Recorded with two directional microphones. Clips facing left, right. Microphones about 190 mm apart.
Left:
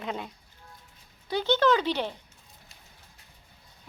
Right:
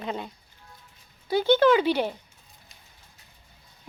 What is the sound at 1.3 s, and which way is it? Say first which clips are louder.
Speech: right 4 dB; 10° right (ahead or behind).